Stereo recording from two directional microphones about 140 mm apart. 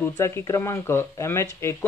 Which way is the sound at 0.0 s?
20° left (ahead or behind).